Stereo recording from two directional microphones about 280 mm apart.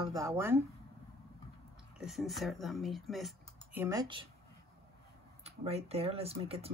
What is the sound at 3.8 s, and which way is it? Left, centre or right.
Speech, centre.